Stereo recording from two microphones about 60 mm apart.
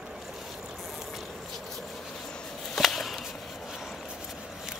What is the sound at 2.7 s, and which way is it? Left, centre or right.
Whip, centre.